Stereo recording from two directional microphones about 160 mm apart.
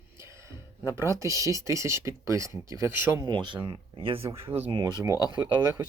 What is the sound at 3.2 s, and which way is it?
Speech, 30° right (ahead or behind).